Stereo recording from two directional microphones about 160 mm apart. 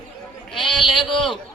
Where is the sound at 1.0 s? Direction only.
30° left (ahead or behind).